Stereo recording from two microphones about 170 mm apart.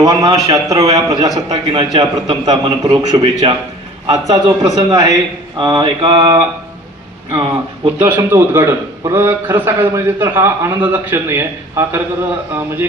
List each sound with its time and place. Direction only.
0.0 s a man's voice: 20° right (ahead or behind)
7.8 s a man's voice: 15° right (ahead or behind)